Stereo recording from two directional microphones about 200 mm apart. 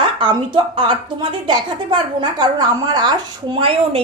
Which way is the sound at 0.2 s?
25° right (ahead or behind).